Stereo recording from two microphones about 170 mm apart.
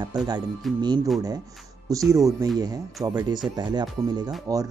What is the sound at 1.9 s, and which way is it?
Speech, 20° right (ahead or behind).